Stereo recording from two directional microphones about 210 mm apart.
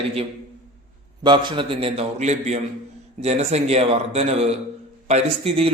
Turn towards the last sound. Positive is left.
turn(degrees=-30)  # may be behind; listen again after turning